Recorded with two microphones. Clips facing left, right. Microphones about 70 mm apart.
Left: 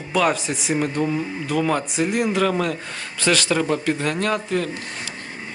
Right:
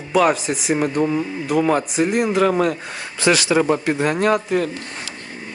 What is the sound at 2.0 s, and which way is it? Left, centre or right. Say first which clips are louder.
Speech: right 3 dB; centre.